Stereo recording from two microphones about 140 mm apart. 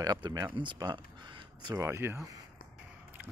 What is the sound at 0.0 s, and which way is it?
Speech, 30° right (ahead or behind).